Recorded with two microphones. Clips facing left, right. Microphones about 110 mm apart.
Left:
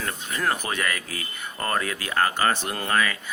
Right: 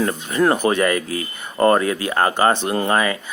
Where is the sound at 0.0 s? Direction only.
30° right (ahead or behind).